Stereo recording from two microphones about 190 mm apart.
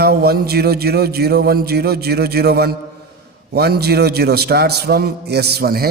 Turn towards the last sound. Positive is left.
turn(degrees=-55)  # may be behind; listen again after turning